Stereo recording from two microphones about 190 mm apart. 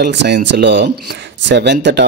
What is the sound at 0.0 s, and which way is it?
Speech, 65° right (ahead or behind).